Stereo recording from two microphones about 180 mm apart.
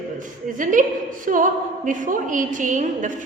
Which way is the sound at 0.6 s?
45° right (ahead or behind).